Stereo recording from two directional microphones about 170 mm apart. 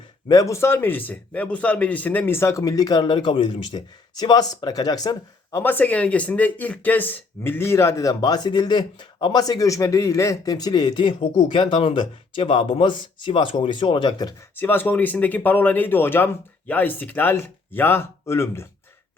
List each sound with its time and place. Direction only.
0.3 s a man's voice: 20° left (ahead or behind)
14.5 s speech: 10° left (ahead or behind)